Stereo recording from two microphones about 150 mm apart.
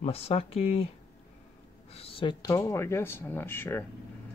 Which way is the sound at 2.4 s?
20° left (ahead or behind).